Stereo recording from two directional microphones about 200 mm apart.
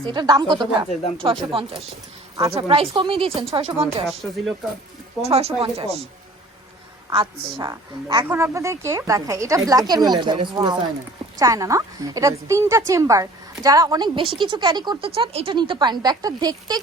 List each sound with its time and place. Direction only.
0.0 s a woman's voice: 20° right (ahead or behind)
4.2 s speech: 5° right (ahead or behind)
5.2 s a woman's voice: 30° right (ahead or behind)
7.1 s a woman's voice: 25° right (ahead or behind)
7.7 s a woman's voice: 15° right (ahead or behind)